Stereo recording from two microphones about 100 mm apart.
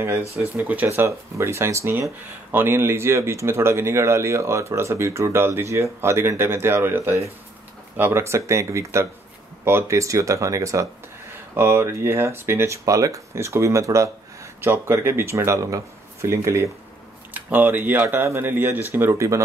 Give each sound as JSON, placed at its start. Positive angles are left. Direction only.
{"t": 0.4, "sound": "speech", "side_deg": -20}
{"t": 17.3, "sound": "speech", "side_deg": -15}